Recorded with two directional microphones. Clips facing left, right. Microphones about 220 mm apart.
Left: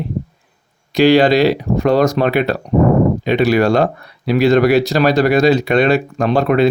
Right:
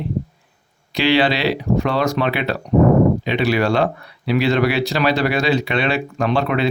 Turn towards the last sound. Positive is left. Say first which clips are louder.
# left 5 dB
turn(degrees=45)  # may be behind; listen again after turning